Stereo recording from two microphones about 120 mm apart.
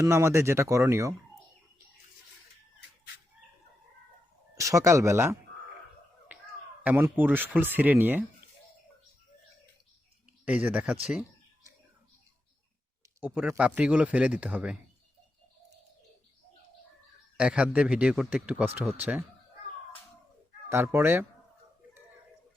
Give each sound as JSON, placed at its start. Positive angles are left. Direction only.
{"t": 0.0, "sound": "speech", "side_deg": -25}
{"t": 4.5, "sound": "speech", "side_deg": -25}
{"t": 6.3, "sound": "finger snapping", "side_deg": -15}
{"t": 6.8, "sound": "a man's voice", "side_deg": -15}
{"t": 10.4, "sound": "a man's voice", "side_deg": -10}
{"t": 13.1, "sound": "a man's voice", "side_deg": -15}
{"t": 17.3, "sound": "a man's voice", "side_deg": -10}
{"t": 20.7, "sound": "speech", "side_deg": -20}